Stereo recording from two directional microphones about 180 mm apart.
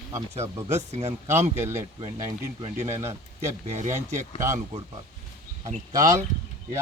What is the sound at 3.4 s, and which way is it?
Speech, 40° right (ahead or behind).